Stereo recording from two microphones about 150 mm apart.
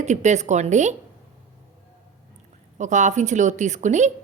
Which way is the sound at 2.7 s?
55° right (ahead or behind).